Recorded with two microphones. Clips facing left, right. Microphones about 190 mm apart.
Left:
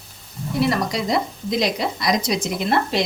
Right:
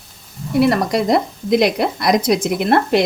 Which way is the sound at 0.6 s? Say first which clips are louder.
Right 6 dB; 55° right (ahead or behind).